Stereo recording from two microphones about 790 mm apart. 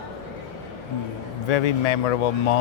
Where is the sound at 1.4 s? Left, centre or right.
Left.